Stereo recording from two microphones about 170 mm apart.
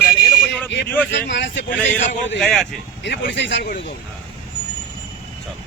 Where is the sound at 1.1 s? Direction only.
90° left.